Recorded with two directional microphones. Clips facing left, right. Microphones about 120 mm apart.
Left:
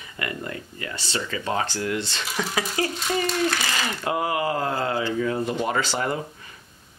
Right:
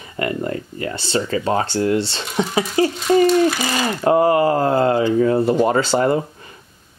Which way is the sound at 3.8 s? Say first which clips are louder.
Right 13 dB; 40° right (ahead or behind).